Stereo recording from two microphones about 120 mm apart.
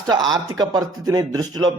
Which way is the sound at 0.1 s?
35° right (ahead or behind).